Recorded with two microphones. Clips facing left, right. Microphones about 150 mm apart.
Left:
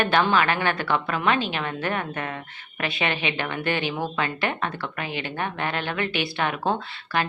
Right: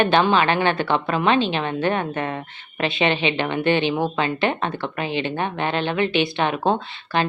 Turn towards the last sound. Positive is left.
turn(degrees=-25)  # may be behind; listen again after turning